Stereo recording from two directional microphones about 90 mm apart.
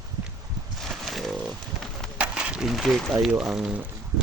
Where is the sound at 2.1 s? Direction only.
10° right (ahead or behind).